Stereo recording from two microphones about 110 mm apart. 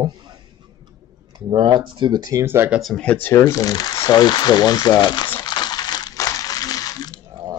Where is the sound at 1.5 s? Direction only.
45° right (ahead or behind).